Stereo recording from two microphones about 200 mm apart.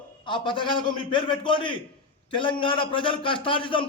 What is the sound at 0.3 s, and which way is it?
A man's voice, 25° left (ahead or behind).